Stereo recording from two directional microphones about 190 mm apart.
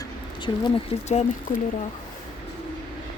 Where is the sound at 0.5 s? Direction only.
20° left (ahead or behind).